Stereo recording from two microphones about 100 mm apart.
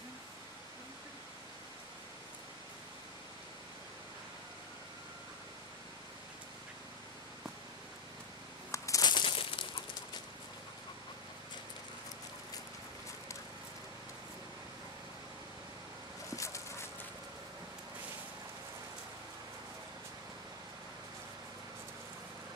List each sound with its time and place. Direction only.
8.7 s a sound: 35° left (ahead or behind)
9.1 s crumpling: 55° left (ahead or behind)
16.3 s clip-clop: 30° left (ahead or behind)